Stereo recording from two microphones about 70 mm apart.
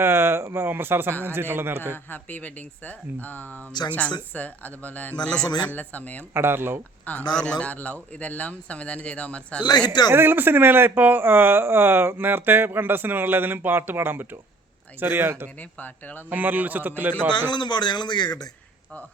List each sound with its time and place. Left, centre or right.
0.0 s speech: right
2.0 s a man's voice: left
6.3 s speech: right
7.0 s a man's voice: centre
10.1 s speech: right
15.8 s a man's voice: left
16.3 s speech: right
17.5 s speech: left